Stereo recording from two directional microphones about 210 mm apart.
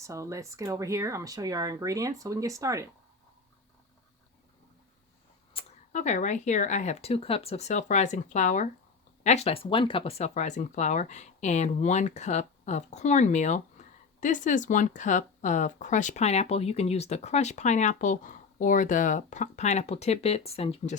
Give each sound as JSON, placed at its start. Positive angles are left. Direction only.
{"t": 0.0, "sound": "speech", "side_deg": -15}
{"t": 5.5, "sound": "speech", "side_deg": 35}